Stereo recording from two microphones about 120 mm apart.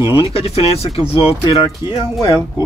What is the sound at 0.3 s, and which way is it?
Speech, 55° left (ahead or behind).